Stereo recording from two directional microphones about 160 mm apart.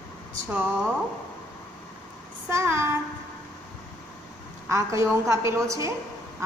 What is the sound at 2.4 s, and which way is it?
Speech, 15° right (ahead or behind).